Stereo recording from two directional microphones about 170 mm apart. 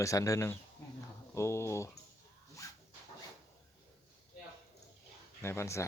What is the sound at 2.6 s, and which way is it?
Dog, 20° left (ahead or behind).